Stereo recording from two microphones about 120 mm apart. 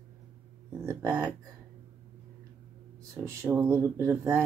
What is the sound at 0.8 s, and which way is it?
Speech, 20° right (ahead or behind).